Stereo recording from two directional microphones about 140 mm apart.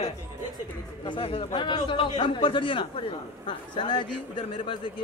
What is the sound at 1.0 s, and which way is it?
A man's voice, 40° left (ahead or behind).